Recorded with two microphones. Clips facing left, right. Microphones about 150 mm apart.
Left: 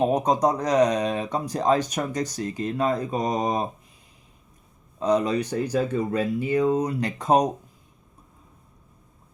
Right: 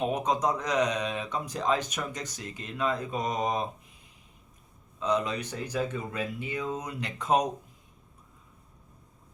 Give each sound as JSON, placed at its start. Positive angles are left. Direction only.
{"t": 0.0, "sound": "speech", "side_deg": 35}
{"t": 4.9, "sound": "speech", "side_deg": 40}